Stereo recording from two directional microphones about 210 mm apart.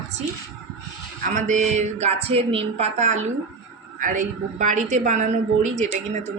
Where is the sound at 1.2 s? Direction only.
35° right (ahead or behind).